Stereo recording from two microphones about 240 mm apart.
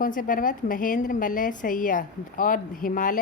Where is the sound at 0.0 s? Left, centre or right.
Left.